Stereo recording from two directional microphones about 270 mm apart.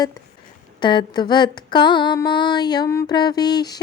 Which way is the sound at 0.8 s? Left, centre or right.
Centre.